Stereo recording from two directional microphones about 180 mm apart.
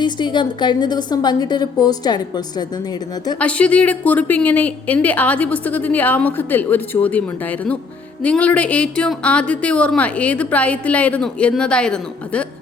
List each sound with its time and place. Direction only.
0.0 s a woman's voice: 25° left (ahead or behind)
3.3 s a woman's voice: 5° left (ahead or behind)